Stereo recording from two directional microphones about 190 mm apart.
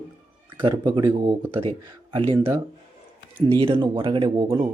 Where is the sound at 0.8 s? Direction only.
25° right (ahead or behind).